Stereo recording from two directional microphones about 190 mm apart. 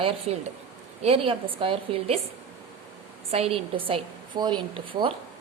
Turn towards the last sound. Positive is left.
turn(degrees=-25)  # may be behind; listen again after turning